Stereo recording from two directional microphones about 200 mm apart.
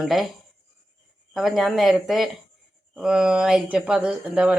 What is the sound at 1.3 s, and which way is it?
Speech, centre (ahead or behind).